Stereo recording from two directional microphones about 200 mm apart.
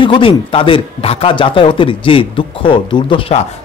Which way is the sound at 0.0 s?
25° left (ahead or behind).